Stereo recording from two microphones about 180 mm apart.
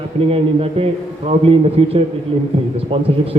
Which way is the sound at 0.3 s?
30° right (ahead or behind).